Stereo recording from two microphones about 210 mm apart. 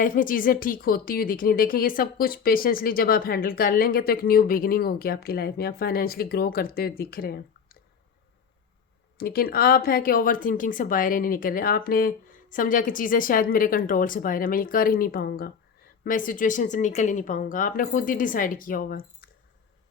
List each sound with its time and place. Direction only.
0.0 s speech: 40° left (ahead or behind)
9.1 s speech: 45° left (ahead or behind)